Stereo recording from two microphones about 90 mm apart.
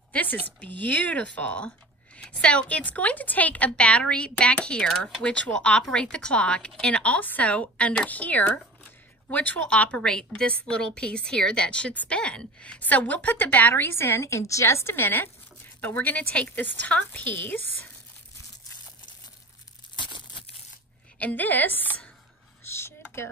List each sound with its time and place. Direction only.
0.1 s a woman's voice: 15° left (ahead or behind)
21.2 s a woman's voice: 20° left (ahead or behind)
22.7 s computer keyboard: 30° left (ahead or behind)